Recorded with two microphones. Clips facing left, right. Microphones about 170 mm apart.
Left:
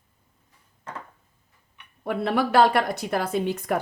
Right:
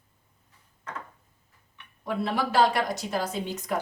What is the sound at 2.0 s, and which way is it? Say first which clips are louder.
A woman's voice: left 4 dB; 60° left (ahead or behind).